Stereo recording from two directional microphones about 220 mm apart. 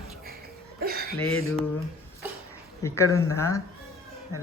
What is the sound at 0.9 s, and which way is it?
Chuckle, 45° right (ahead or behind).